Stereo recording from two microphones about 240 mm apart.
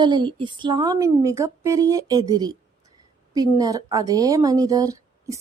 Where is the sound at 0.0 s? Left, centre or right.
Centre.